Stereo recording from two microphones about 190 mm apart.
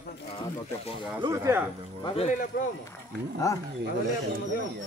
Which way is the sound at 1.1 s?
15° right (ahead or behind).